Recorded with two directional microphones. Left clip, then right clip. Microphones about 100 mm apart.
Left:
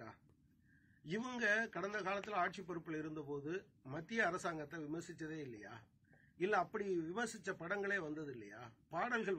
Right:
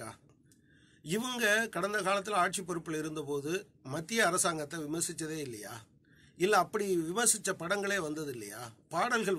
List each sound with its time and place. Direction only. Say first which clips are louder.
1.0 s speech: right 8 dB; 45° right (ahead or behind)